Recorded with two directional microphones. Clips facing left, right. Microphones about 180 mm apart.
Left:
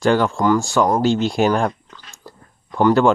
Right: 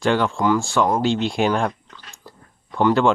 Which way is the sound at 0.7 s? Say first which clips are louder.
Left 3 dB; 40° left (ahead or behind).